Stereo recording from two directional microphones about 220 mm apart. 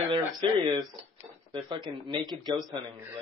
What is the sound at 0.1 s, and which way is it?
A man's voice, 20° right (ahead or behind).